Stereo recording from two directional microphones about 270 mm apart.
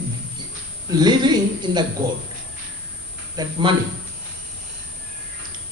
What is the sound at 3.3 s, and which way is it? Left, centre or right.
Speech, centre.